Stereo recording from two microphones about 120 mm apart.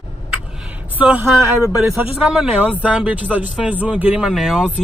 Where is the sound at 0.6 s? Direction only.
10° right (ahead or behind).